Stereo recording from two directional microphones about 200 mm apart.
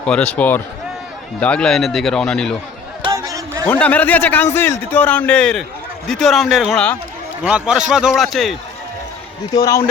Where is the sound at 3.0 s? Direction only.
15° right (ahead or behind).